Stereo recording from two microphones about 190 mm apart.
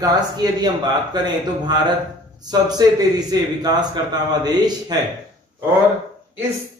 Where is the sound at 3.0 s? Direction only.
20° right (ahead or behind).